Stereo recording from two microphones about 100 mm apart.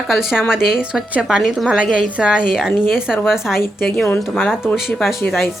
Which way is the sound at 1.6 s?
10° right (ahead or behind).